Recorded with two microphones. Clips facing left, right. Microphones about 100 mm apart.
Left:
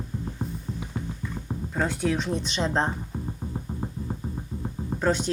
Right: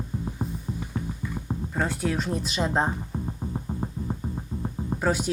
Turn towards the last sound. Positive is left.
turn(degrees=-5)  # may be behind; listen again after turning